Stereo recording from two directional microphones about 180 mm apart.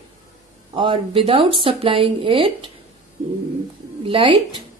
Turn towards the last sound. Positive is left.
turn(degrees=-30)  # may be behind; listen again after turning